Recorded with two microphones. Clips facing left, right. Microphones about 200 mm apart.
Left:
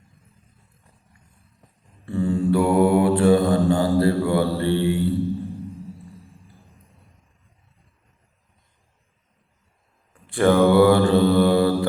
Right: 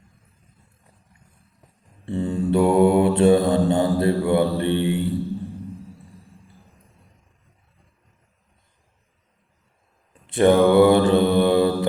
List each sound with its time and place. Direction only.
2.0 s mantra: 20° right (ahead or behind)
10.2 s mantra: 20° right (ahead or behind)